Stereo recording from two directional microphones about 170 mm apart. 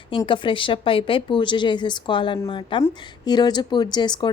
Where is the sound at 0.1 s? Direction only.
30° left (ahead or behind).